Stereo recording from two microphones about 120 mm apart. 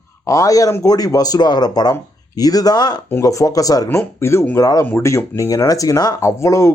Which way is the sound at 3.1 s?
25° left (ahead or behind).